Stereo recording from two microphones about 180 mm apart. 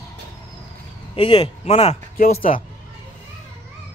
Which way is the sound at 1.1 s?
30° left (ahead or behind).